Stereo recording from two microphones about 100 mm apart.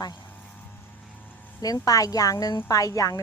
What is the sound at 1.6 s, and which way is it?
A woman's voice, 40° left (ahead or behind).